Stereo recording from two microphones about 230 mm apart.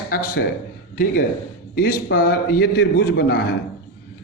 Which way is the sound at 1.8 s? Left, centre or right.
Left.